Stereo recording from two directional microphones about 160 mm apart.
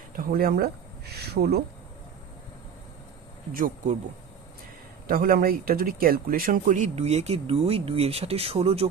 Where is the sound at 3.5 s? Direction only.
60° right (ahead or behind).